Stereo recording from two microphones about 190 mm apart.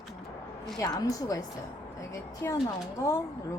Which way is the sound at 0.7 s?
20° left (ahead or behind).